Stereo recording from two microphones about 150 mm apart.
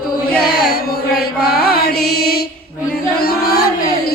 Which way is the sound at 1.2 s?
90° left.